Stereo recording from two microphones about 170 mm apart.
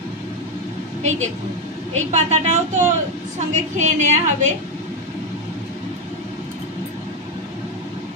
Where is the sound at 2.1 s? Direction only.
40° right (ahead or behind).